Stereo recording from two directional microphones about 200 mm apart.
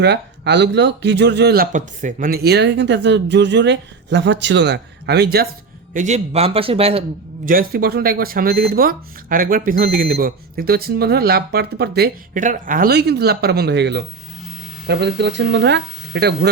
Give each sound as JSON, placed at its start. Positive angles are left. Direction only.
{"t": 0.0, "sound": "speech", "side_deg": -55}
{"t": 1.7, "sound": "speech", "side_deg": -40}
{"t": 5.9, "sound": "a man's voice", "side_deg": -35}
{"t": 7.4, "sound": "speech", "side_deg": -50}